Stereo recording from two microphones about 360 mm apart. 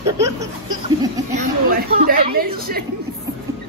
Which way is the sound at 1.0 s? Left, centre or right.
Right.